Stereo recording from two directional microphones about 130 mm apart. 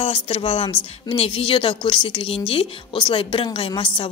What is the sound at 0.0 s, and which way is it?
A woman's voice, 45° left (ahead or behind).